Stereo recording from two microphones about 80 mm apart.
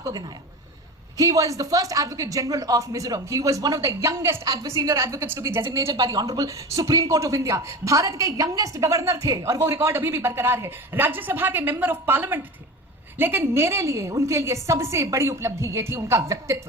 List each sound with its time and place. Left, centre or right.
1.1 s a woman's voice: right
5.9 s a woman's voice: right